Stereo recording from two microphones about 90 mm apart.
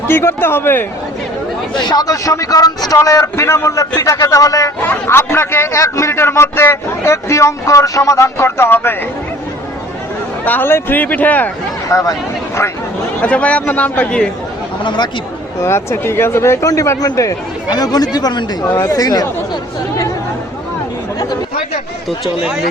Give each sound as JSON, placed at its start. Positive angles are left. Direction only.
{"t": 0.1, "sound": "a man's voice", "side_deg": 25}
{"t": 1.7, "sound": "a man's voice", "side_deg": 50}
{"t": 5.0, "sound": "a man's voice", "side_deg": 25}
{"t": 10.4, "sound": "a man's voice", "side_deg": 20}
{"t": 11.9, "sound": "speech", "side_deg": 35}
{"t": 13.2, "sound": "a man's voice", "side_deg": 15}
{"t": 14.8, "sound": "speech", "side_deg": 55}
{"t": 15.6, "sound": "a man's voice", "side_deg": 30}
{"t": 17.7, "sound": "speech", "side_deg": 50}